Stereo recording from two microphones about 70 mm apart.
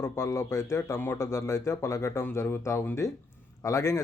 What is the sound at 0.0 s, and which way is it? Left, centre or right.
Speech, left.